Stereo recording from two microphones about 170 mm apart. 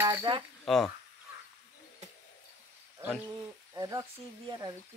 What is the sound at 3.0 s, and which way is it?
Speech, 15° right (ahead or behind).